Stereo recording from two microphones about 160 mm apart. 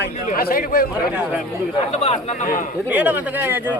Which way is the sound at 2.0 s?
40° left (ahead or behind).